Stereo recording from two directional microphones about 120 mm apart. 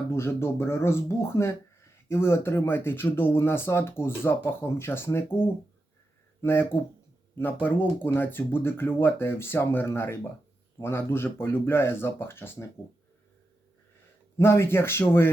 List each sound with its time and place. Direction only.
0.1 s speech: 20° left (ahead or behind)
14.3 s speech: 20° left (ahead or behind)